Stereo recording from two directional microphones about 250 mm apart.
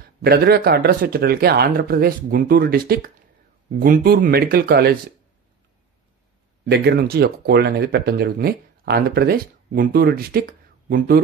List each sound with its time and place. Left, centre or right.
0.0 s speech: right
6.6 s speech: right